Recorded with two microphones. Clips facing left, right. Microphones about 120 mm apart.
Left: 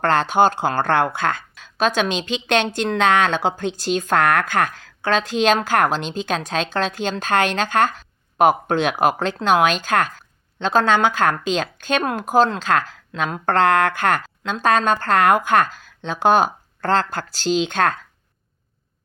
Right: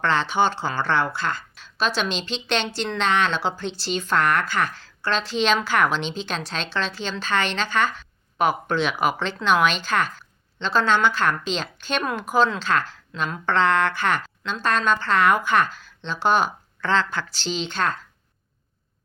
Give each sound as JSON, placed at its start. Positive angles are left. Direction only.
{"t": 0.0, "sound": "a woman's voice", "side_deg": 50}